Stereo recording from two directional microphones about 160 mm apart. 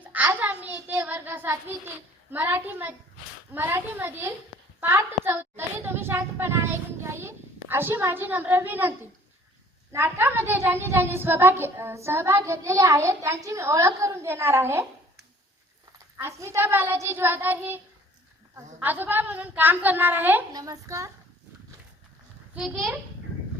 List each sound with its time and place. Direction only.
0.0 s child singing: 10° right (ahead or behind)
2.3 s a woman's voice: 15° right (ahead or behind)
16.1 s a woman's voice: 20° right (ahead or behind)
20.5 s a woman's voice: 20° right (ahead or behind)
22.5 s a child's voice: centre (ahead or behind)